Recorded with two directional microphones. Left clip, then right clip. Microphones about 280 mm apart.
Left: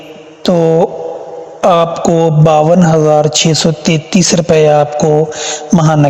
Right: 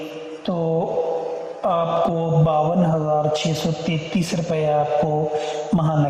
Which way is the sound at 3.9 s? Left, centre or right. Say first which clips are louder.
Left 13 dB; left.